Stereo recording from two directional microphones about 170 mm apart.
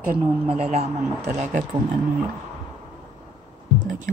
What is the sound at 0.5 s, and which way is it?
Speech, 40° right (ahead or behind).